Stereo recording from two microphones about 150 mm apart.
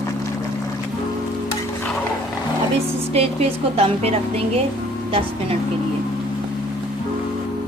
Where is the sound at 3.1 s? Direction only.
40° right (ahead or behind).